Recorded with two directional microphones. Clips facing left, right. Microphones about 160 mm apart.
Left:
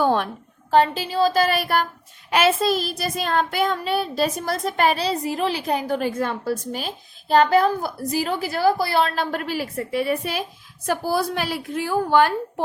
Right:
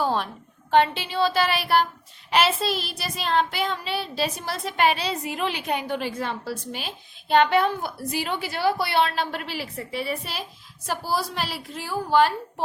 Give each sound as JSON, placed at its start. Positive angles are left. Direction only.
{"t": 0.0, "sound": "a sound", "side_deg": 60}
{"t": 0.7, "sound": "child singing", "side_deg": 40}
{"t": 10.8, "sound": "a woman's voice", "side_deg": 55}